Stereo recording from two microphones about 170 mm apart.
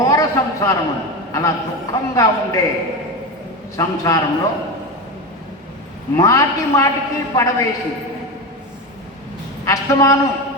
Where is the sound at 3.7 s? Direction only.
20° left (ahead or behind).